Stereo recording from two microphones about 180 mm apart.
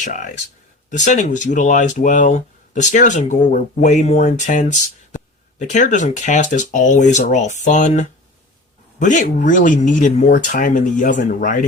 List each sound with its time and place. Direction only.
0.0 s speech: 45° left (ahead or behind)